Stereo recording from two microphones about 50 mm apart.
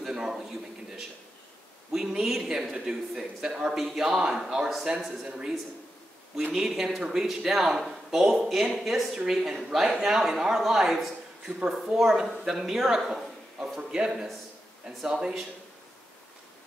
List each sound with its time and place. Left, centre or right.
0.0 s a sound: centre
1.9 s speech: centre
2.7 s speech: centre
6.7 s speech: centre